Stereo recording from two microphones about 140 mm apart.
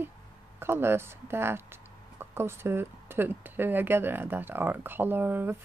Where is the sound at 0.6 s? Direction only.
15° right (ahead or behind).